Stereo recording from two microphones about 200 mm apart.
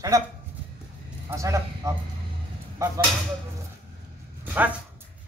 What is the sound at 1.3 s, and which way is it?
Speech, 15° right (ahead or behind).